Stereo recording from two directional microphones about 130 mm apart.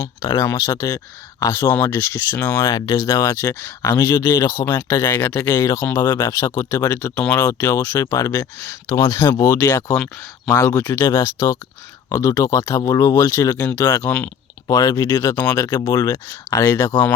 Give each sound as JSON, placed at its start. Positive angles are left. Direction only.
{"t": 0.0, "sound": "speech", "side_deg": 25}
{"t": 4.4, "sound": "speech", "side_deg": 15}
{"t": 4.9, "sound": "speech", "side_deg": 30}
{"t": 5.1, "sound": "speech", "side_deg": 15}
{"t": 7.3, "sound": "speech", "side_deg": 25}
{"t": 9.9, "sound": "speech", "side_deg": 5}
{"t": 10.6, "sound": "speech", "side_deg": 20}
{"t": 14.0, "sound": "speech", "side_deg": 10}
{"t": 14.7, "sound": "speech", "side_deg": 25}